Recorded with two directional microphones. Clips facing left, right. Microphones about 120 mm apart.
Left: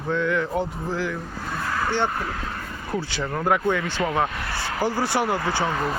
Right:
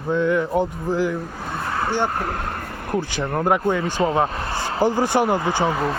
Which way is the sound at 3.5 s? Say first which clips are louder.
Right 1 dB; 20° right (ahead or behind).